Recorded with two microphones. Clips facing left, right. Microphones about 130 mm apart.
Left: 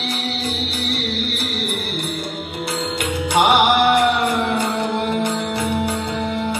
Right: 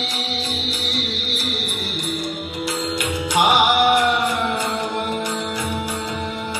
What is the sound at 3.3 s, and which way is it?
Music, 60° left (ahead or behind).